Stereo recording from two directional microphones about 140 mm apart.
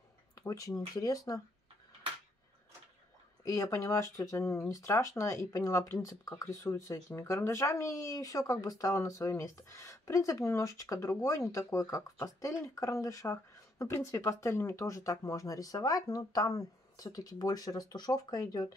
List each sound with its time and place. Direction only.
0.4 s speech: 25° left (ahead or behind)
3.4 s speech: 25° left (ahead or behind)